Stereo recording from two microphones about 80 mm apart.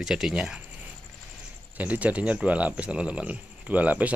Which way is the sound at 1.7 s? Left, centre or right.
Centre.